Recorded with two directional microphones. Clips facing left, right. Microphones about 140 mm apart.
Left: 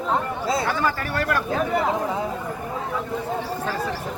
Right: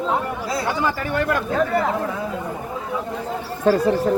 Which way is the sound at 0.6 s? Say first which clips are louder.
Right 1 dB; 20° right (ahead or behind).